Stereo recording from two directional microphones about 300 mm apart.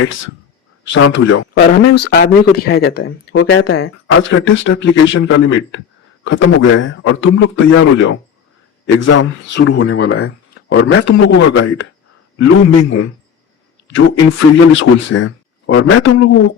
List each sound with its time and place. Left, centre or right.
0.0 s speech: left
6.7 s speech: left
10.5 s a man's voice: left